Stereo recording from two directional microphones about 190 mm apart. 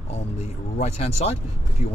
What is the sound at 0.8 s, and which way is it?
Speech, 35° left (ahead or behind).